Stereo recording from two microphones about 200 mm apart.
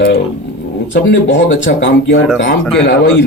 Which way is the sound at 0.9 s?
65° left (ahead or behind).